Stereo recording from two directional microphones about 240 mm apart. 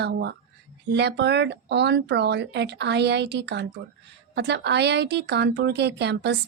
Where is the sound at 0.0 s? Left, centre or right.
Right.